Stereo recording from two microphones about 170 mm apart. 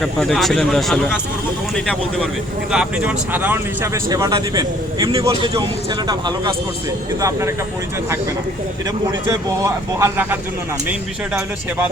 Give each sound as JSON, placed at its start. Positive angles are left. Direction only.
{"t": 0.0, "sound": "speech", "side_deg": 0}
{"t": 2.7, "sound": "speech", "side_deg": -10}
{"t": 9.2, "sound": "speech", "side_deg": -15}